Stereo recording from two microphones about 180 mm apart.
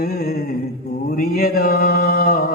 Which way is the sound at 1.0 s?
55° left (ahead or behind).